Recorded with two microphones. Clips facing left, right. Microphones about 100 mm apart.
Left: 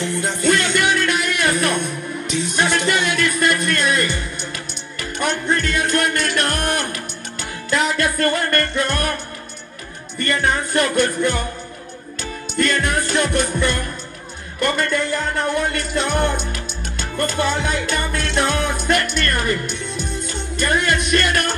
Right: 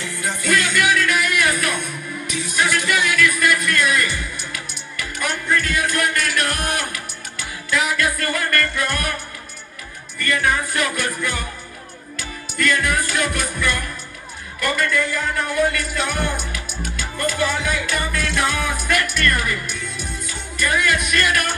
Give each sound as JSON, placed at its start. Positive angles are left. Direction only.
{"t": 0.2, "sound": "music", "side_deg": 25}
{"t": 10.1, "sound": "music", "side_deg": 30}
{"t": 12.5, "sound": "music", "side_deg": 30}